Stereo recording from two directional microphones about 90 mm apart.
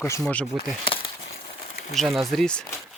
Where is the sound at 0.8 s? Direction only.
80° left.